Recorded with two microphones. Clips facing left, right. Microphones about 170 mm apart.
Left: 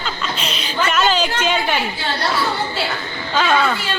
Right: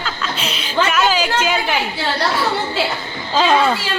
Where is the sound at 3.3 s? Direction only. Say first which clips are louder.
Right 3 dB; 30° right (ahead or behind).